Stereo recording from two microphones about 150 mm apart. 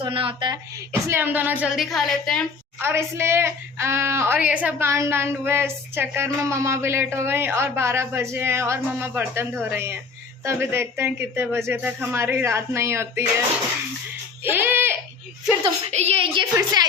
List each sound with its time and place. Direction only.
0.0 s a woman's voice: 35° right (ahead or behind)
1.0 s a woman's voice: 15° right (ahead or behind); by 2.5 s 5° left (ahead or behind)
2.7 s a woman's voice: 15° right (ahead or behind)
14.4 s speech: 15° right (ahead or behind)
15.9 s a woman's voice: 45° right (ahead or behind); by 16.8 s 30° right (ahead or behind)